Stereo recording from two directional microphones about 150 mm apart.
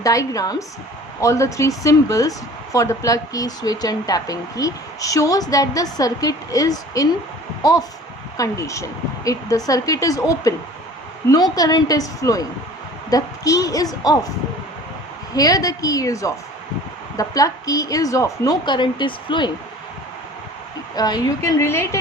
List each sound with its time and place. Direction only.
0.0 s speech: 20° left (ahead or behind)
11.5 s speech: 25° left (ahead or behind)
15.4 s speech: 25° left (ahead or behind)
20.9 s speech: 25° left (ahead or behind)